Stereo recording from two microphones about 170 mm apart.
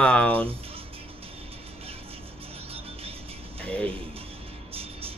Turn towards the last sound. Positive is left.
turn(degrees=5)  # may be behind; listen again after turning